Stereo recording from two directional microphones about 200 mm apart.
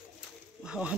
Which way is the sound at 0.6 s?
5° right (ahead or behind).